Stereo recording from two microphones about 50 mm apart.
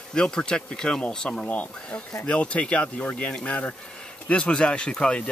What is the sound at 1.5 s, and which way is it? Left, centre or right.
Speech, left.